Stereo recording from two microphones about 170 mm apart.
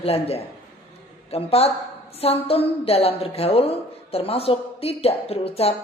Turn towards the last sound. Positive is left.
turn(degrees=35)  # may be behind; listen again after turning